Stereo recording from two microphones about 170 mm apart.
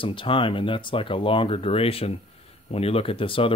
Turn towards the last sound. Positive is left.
turn(degrees=30)  # may be behind; listen again after turning